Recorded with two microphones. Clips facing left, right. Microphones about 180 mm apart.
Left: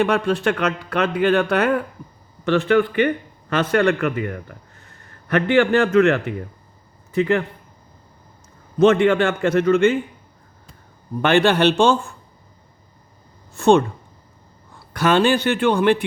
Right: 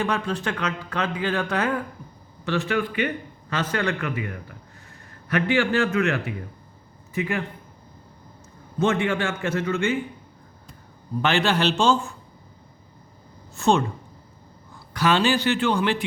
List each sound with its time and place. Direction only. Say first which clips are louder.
0.0 s a man's voice: left 7 dB; 75° left (ahead or behind)
8.8 s a man's voice: left 8 dB; 65° left (ahead or behind)
11.2 s a man's voice: left 6 dB; 55° left (ahead or behind)
13.6 s a man's voice: left 6 dB; 55° left (ahead or behind)
14.9 s a man's voice: left 4 dB; 55° left (ahead or behind)